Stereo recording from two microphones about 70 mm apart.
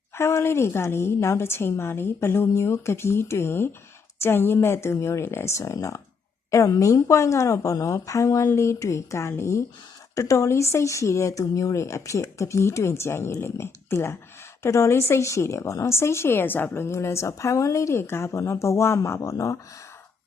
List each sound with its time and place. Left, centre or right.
0.1 s a woman's voice: left